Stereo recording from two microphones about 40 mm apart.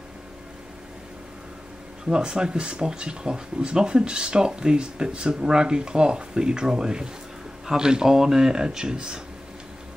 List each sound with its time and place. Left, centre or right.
2.0 s speech: centre